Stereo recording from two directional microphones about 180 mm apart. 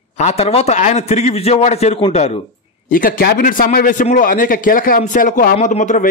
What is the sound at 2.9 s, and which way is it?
A man's voice, 55° left (ahead or behind).